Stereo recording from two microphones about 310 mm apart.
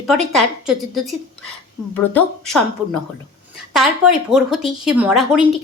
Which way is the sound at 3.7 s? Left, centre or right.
Centre.